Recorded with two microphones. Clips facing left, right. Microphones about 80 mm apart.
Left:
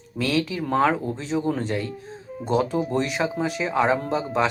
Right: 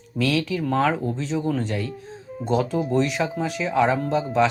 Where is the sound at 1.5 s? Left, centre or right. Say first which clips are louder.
Right 1 dB; left.